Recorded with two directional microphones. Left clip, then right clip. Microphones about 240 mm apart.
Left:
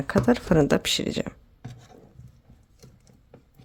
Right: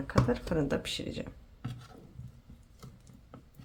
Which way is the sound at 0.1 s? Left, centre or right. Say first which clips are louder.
Left 9 dB; left.